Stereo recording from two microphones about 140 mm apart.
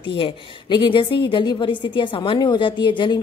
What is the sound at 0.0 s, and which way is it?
A woman's voice, 35° left (ahead or behind).